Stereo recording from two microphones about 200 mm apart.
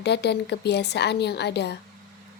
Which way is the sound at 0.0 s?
60° left (ahead or behind).